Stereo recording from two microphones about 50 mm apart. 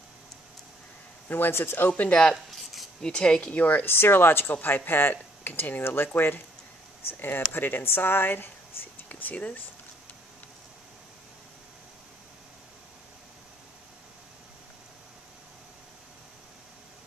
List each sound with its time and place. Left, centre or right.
1.3 s speech: left
1.9 s speech: left
2.5 s a sound: centre
3.0 s speech: centre
3.8 s speech: left
5.1 s a sound: left
5.6 s speech: left
9.1 s speech: left